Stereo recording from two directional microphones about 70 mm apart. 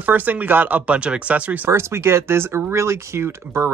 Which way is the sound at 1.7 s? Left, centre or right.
Right.